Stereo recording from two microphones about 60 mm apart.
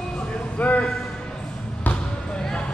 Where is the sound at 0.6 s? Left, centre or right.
Left.